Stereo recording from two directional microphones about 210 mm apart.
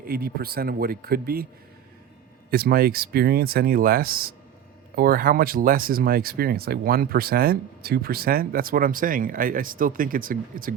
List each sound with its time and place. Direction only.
0.0 s speech: 45° right (ahead or behind)
2.5 s speech: 45° right (ahead or behind)